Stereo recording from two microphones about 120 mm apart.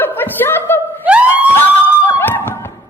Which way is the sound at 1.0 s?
10° right (ahead or behind).